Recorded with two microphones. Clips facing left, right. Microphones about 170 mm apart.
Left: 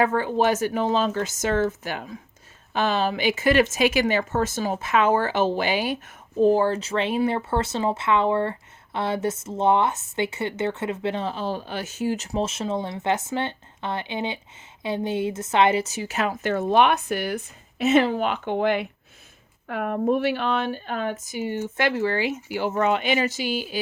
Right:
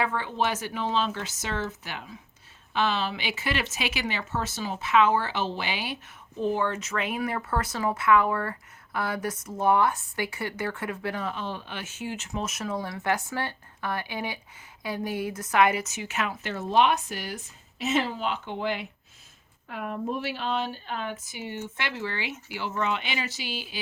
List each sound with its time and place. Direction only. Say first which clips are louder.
0.0 s a woman's voice: left 7 dB; 45° left (ahead or behind)